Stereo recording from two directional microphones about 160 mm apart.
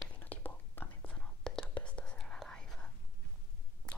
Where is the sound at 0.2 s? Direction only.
10° left (ahead or behind).